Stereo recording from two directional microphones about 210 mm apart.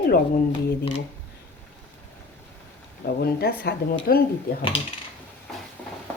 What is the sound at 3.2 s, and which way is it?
Speech, 50° left (ahead or behind).